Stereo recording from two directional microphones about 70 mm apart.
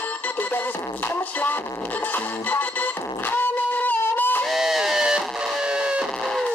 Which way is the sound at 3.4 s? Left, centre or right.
Left.